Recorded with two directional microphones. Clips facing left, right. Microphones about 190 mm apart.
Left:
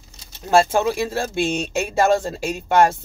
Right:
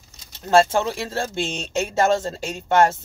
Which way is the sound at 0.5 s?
15° left (ahead or behind).